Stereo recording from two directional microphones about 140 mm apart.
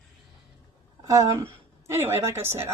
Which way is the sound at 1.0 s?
25° right (ahead or behind).